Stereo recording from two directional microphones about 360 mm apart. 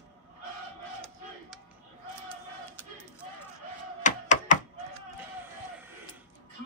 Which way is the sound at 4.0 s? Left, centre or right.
Centre.